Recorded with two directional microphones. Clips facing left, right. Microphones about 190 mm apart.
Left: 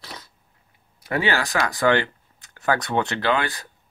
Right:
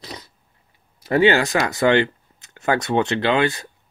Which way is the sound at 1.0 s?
25° right (ahead or behind).